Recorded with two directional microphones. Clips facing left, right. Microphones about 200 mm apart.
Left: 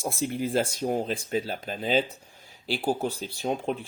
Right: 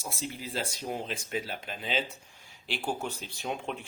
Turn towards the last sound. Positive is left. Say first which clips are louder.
# left 7 dB
turn(degrees=35)  # may be behind; listen again after turning